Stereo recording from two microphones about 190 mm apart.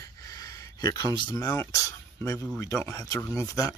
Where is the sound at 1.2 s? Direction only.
20° left (ahead or behind).